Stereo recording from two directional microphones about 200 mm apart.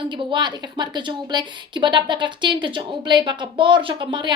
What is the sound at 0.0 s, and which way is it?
A woman's voice, 25° right (ahead or behind).